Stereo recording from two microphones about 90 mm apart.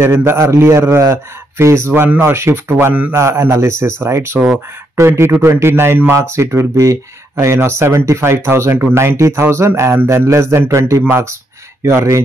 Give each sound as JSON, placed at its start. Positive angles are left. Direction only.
{"t": 0.0, "sound": "a man's voice", "side_deg": -30}